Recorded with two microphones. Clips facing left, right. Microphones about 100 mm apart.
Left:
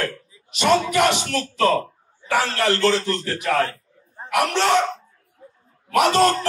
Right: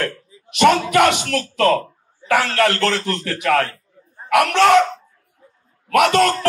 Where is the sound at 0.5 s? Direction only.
65° right (ahead or behind).